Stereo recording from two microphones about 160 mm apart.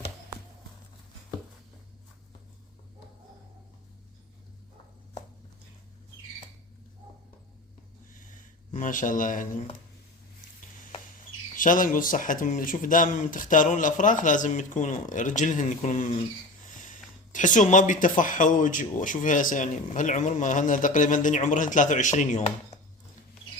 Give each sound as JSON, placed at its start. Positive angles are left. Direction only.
{"t": 8.7, "sound": "speech", "side_deg": 55}
{"t": 11.5, "sound": "speech", "side_deg": 55}